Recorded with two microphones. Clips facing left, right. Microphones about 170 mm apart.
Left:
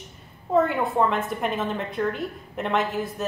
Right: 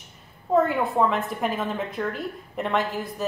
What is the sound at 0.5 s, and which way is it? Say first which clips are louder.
A woman's voice: even; centre (ahead or behind).